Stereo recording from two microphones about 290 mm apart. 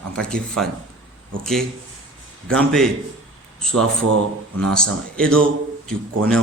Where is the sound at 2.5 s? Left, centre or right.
Centre.